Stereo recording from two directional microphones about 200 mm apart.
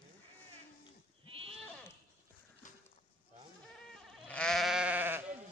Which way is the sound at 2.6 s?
40° left (ahead or behind).